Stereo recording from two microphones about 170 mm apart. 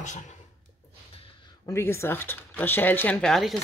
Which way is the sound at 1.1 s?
30° left (ahead or behind).